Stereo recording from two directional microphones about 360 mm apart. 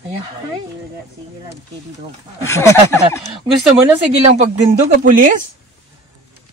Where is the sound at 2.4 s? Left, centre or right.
Centre.